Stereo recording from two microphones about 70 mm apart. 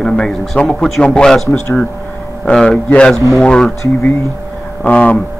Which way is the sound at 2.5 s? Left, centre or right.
Centre.